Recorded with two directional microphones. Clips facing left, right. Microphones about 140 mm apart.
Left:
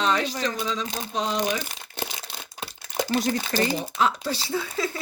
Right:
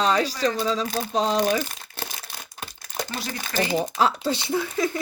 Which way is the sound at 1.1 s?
35° right (ahead or behind).